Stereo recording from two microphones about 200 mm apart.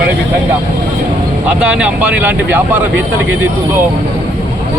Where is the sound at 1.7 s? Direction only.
5° right (ahead or behind).